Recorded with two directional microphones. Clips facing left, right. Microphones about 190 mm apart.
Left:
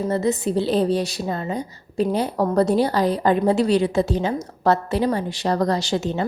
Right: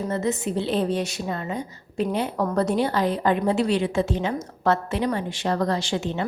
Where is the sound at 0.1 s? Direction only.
35° left (ahead or behind).